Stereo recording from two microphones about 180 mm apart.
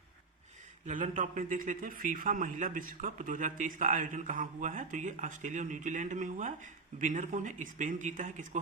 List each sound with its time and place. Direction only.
0.9 s a man's voice: 45° right (ahead or behind)